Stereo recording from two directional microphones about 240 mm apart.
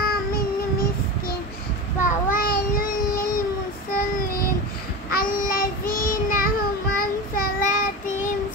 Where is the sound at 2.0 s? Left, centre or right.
Left.